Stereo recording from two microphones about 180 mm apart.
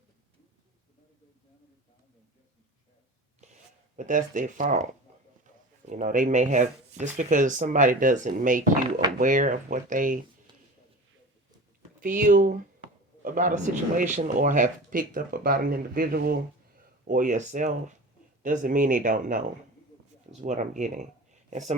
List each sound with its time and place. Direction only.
3.4 s a sound: 40° right (ahead or behind)
3.9 s speech: 45° right (ahead or behind)
5.9 s speech: 45° right (ahead or behind)
11.9 s speech: 50° right (ahead or behind)
17.1 s speech: 45° right (ahead or behind)